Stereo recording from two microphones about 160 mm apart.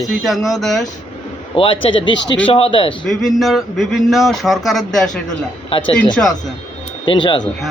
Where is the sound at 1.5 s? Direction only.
35° left (ahead or behind).